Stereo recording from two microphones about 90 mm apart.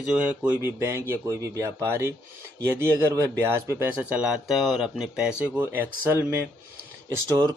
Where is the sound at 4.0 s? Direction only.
10° right (ahead or behind).